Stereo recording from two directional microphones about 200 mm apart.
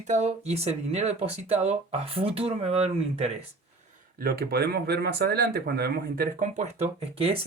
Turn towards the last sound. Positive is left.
turn(degrees=-30)  # may be behind; listen again after turning